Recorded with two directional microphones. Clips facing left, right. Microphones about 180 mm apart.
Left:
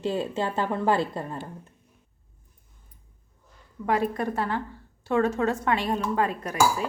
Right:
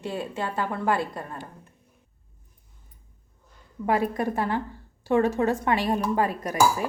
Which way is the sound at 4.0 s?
10° right (ahead or behind).